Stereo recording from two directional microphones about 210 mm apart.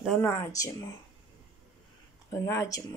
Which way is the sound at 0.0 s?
5° left (ahead or behind).